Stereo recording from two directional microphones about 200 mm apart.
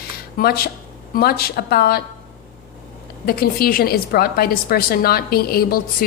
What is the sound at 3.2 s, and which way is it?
A woman's voice, 50° left (ahead or behind).